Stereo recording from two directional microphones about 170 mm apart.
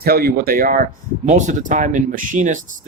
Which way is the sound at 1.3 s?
45° right (ahead or behind).